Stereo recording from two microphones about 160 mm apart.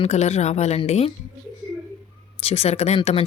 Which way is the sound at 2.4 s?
40° left (ahead or behind).